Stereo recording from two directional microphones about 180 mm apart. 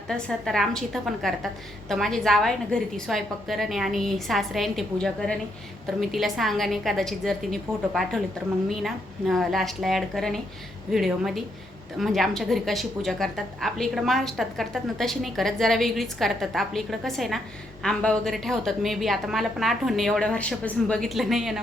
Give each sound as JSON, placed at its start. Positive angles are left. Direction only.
{"t": 0.1, "sound": "a woman's voice", "side_deg": 0}